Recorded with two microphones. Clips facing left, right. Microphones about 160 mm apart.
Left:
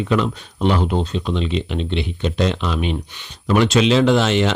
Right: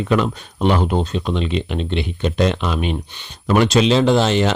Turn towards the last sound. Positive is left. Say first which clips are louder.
# even
turn(degrees=-35)  # may be behind; listen again after turning